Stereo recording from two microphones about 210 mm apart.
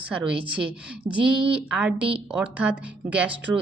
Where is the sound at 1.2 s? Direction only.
25° right (ahead or behind).